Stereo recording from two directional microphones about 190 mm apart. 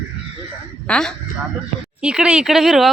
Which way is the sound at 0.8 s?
5° left (ahead or behind).